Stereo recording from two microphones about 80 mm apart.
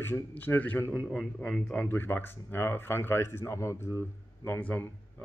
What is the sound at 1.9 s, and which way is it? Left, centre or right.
A man's voice, left.